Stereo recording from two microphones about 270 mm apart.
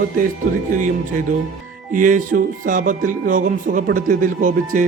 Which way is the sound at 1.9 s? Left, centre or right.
Right.